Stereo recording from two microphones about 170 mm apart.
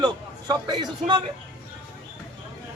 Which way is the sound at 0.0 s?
25° right (ahead or behind).